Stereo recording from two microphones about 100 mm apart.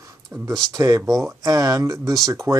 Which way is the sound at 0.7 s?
30° right (ahead or behind).